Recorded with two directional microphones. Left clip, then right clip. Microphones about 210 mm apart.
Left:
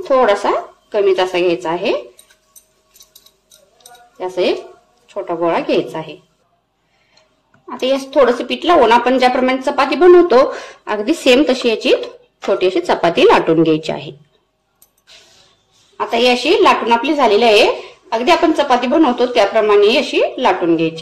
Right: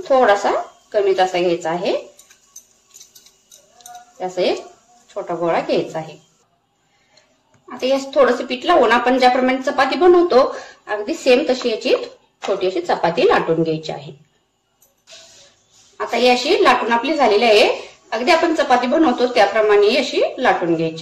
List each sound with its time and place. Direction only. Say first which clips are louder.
0.0 s a woman's voice: left 1 dB; 25° left (ahead or behind)
4.2 s a woman's voice: left 2 dB; 25° left (ahead or behind)
7.6 s a woman's voice: left 2 dB; 30° left (ahead or behind)
16.0 s a woman's voice: left 2 dB; 25° left (ahead or behind)